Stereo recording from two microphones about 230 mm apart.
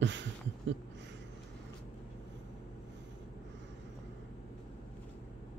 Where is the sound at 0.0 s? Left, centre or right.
Right.